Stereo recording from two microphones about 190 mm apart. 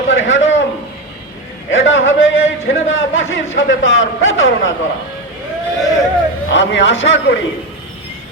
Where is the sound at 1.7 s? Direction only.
85° left.